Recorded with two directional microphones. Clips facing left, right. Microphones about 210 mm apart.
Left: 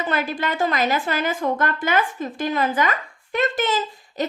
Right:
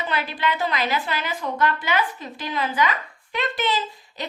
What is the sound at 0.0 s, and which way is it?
A woman's voice, 45° left (ahead or behind).